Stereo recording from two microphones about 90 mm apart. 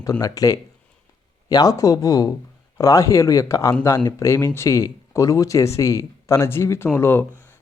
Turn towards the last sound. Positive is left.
turn(degrees=25)  # may be behind; listen again after turning